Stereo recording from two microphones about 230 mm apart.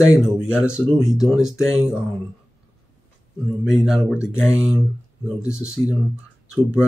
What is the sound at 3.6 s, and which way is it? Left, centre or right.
Speech, centre.